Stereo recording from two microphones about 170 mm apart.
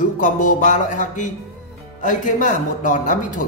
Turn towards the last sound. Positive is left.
turn(degrees=50)  # may be behind; listen again after turning